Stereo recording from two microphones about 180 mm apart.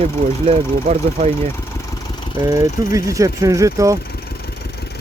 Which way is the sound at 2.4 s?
20° right (ahead or behind).